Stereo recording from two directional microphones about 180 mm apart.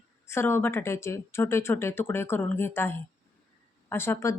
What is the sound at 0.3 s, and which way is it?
A woman's voice, 15° left (ahead or behind).